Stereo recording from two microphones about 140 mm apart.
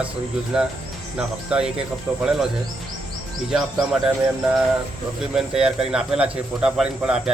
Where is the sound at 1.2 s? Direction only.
5° right (ahead or behind).